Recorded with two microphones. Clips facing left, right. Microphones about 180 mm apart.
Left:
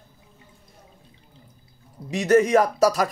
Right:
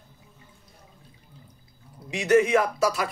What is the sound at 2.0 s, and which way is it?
Speech, 40° left (ahead or behind).